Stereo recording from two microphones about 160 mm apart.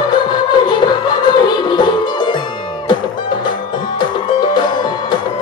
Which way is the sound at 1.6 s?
30° left (ahead or behind).